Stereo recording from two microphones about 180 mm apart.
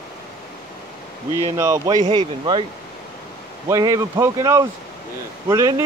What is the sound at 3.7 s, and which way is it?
Speech, 20° right (ahead or behind).